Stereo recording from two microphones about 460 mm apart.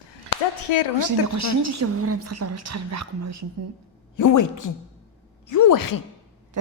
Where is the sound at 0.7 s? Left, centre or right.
Left.